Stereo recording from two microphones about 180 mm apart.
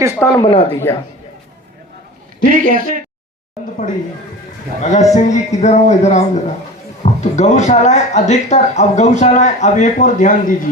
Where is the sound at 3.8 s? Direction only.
40° left (ahead or behind).